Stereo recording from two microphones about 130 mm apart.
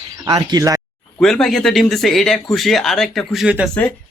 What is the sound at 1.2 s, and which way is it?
Speech, 5° left (ahead or behind).